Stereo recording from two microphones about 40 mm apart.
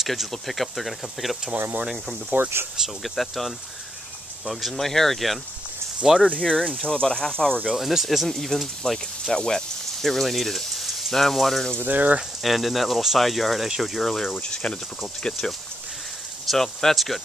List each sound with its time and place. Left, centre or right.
0.0 s speech: centre
2.3 s speech: right
3.0 s speech: centre
6.2 s speech: left
7.7 s speech: centre
9.3 s speech: left
10.0 s speech: centre
11.8 s speech: right
12.4 s speech: centre
14.4 s speech: left
16.4 s speech: centre